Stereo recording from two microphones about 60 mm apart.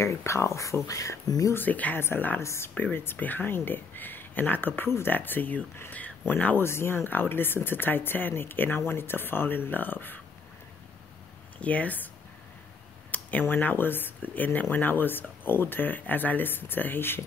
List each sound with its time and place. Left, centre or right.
0.0 s speech: left
1.5 s speech: left
2.0 s speech: left
3.2 s speech: left
6.6 s speech: left
11.5 s speech: left
13.1 s speech: left